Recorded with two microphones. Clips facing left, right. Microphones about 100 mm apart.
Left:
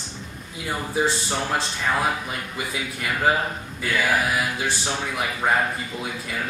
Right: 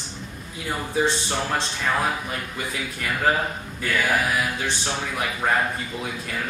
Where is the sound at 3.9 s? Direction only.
5° left (ahead or behind).